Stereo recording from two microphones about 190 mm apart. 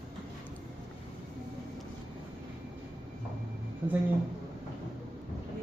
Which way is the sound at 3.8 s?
10° right (ahead or behind).